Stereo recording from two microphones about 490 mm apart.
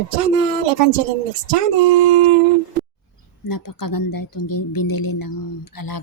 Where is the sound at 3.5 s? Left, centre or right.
Left.